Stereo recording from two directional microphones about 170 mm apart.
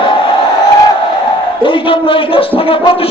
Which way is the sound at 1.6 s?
30° left (ahead or behind).